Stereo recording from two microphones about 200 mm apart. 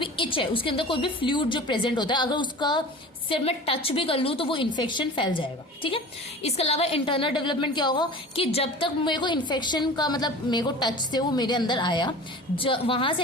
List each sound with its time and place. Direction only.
0.0 s a woman's voice: 25° left (ahead or behind)